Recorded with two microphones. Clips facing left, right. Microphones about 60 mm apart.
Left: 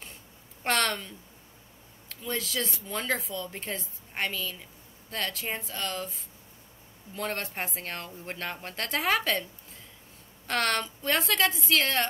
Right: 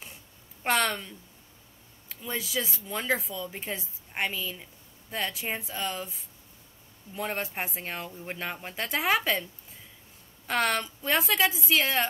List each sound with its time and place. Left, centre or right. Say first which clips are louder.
0.7 s a woman's voice: right 1 dB; centre